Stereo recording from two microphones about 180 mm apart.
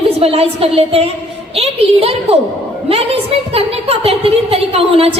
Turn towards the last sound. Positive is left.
turn(degrees=-35)  # may be behind; listen again after turning